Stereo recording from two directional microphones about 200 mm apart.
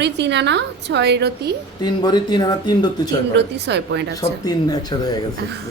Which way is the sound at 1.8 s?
20° left (ahead or behind).